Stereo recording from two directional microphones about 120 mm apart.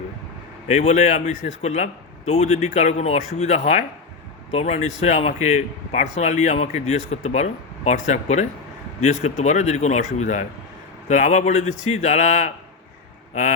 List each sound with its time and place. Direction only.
0.7 s a man's voice: 70° left (ahead or behind)
4.5 s a man's voice: 65° left (ahead or behind); by 12.5 s 90° left